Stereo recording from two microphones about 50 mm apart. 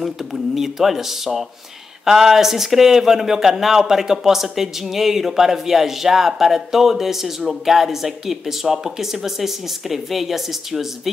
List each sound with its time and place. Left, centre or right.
0.0 s speech: centre